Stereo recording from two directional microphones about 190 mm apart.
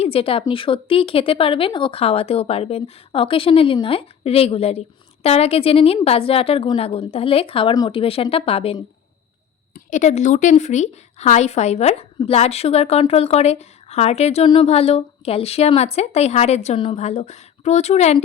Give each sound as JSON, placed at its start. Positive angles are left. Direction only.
{"t": 0.0, "sound": "a woman's voice", "side_deg": 30}